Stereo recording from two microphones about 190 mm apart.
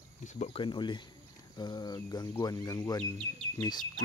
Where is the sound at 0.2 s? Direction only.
40° left (ahead or behind).